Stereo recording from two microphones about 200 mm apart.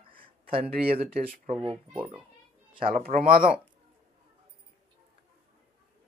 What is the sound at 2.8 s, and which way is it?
Speech, 45° right (ahead or behind).